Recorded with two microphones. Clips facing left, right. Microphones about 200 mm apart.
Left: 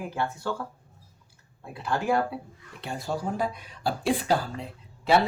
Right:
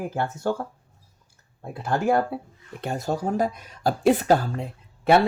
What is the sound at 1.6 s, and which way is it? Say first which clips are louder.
Speech: right 4 dB; 45° right (ahead or behind).